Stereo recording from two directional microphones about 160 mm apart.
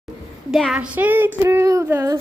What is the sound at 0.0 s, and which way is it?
Speech, centre (ahead or behind).